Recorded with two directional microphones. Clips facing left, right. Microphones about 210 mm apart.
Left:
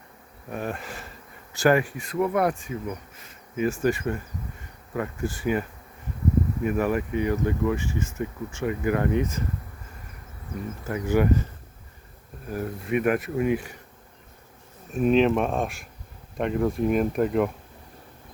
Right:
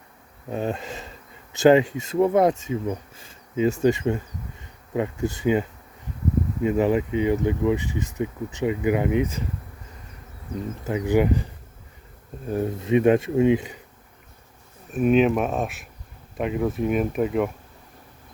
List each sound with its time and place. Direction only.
0.5 s speech: 25° right (ahead or behind)
10.8 s speech: 15° right (ahead or behind)
12.5 s speech: 25° right (ahead or behind)
14.9 s speech: 5° right (ahead or behind)